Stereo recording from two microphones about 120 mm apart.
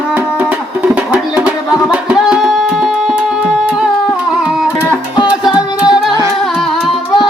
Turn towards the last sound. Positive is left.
turn(degrees=-5)  # may be behind; listen again after turning